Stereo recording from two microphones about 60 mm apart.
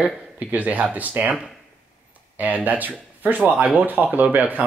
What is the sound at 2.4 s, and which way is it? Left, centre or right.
Speech, right.